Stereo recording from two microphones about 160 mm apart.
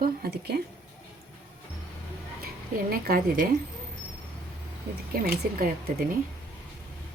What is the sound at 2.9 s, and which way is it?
Speech, 65° right (ahead or behind).